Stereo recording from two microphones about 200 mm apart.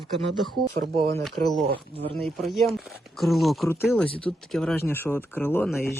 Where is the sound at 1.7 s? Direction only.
30° right (ahead or behind).